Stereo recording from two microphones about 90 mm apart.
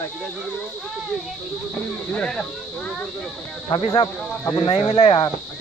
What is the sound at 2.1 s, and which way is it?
Speech, 10° left (ahead or behind).